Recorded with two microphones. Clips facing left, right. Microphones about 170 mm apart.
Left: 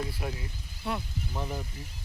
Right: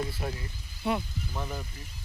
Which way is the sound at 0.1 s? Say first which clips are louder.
Right 1 dB; 10° left (ahead or behind).